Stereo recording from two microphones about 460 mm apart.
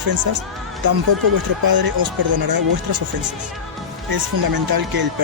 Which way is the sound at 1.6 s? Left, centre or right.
Right.